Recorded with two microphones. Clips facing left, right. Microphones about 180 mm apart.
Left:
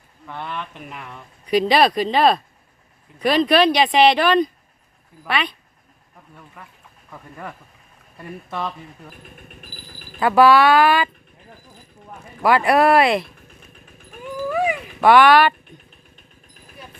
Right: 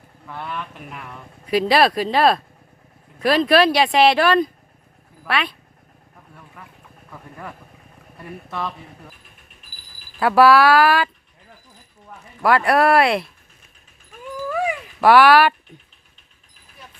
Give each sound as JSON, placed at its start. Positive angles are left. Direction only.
{"t": 0.3, "sound": "speech", "side_deg": -5}
{"t": 6.6, "sound": "speech", "side_deg": 5}
{"t": 8.4, "sound": "speech", "side_deg": 0}
{"t": 9.6, "sound": "a sound", "side_deg": 55}
{"t": 10.2, "sound": "speech", "side_deg": 0}
{"t": 12.4, "sound": "speech", "side_deg": 0}
{"t": 15.0, "sound": "speech", "side_deg": -5}